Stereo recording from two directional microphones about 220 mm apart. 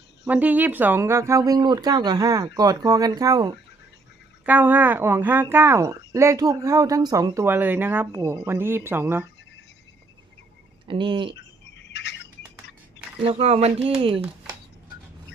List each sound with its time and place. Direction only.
0.3 s speech: 5° right (ahead or behind)
10.8 s speech: 20° right (ahead or behind)
11.3 s a sound: 50° left (ahead or behind)
13.2 s speech: 30° right (ahead or behind)